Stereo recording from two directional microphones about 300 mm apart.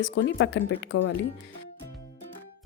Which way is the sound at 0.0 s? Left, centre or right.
Left.